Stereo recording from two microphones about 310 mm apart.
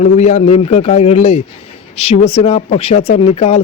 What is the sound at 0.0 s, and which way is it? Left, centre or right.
Speech, left.